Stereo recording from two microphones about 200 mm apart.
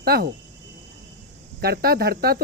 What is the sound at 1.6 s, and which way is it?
Speech, 50° right (ahead or behind).